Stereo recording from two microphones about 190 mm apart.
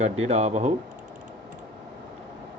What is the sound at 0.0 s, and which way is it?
Speech, 35° right (ahead or behind).